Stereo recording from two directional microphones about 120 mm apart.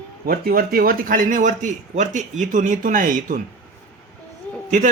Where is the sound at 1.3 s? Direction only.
90° right.